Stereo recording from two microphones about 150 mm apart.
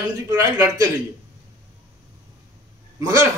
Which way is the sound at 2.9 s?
20° right (ahead or behind).